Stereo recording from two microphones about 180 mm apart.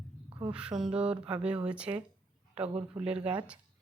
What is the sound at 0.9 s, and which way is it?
A woman's voice, 5° right (ahead or behind).